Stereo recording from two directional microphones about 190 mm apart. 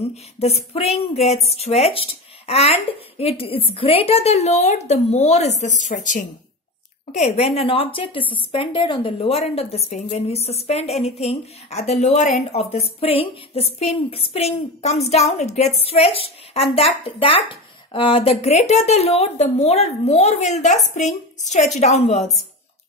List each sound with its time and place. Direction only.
0.0 s a woman's voice: 35° left (ahead or behind)
22.2 s a woman's voice: centre (ahead or behind)